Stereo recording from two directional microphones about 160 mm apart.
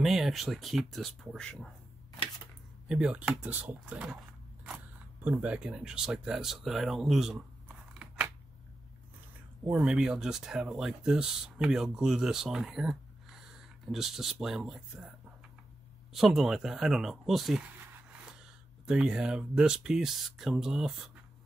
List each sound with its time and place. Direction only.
0.0 s speech: centre (ahead or behind)
2.9 s speech: 5° right (ahead or behind)
5.2 s speech: 10° right (ahead or behind)
9.7 s speech: 5° right (ahead or behind)